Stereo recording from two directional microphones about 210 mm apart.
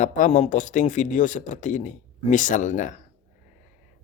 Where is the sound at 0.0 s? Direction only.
35° left (ahead or behind).